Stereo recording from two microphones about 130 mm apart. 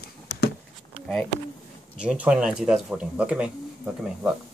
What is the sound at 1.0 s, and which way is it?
Speech, 5° left (ahead or behind).